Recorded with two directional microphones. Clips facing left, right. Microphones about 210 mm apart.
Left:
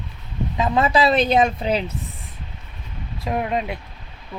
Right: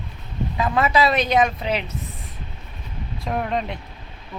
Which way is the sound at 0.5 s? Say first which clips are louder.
Left 1 dB; 25° left (ahead or behind).